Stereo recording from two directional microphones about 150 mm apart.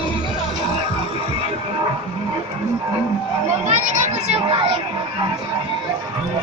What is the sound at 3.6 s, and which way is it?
Speech, 50° right (ahead or behind).